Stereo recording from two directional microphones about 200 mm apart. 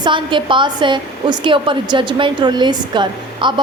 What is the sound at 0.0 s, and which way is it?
A woman's voice, 25° right (ahead or behind).